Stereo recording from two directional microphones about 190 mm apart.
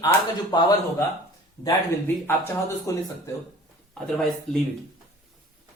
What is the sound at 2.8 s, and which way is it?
Speech, 15° left (ahead or behind).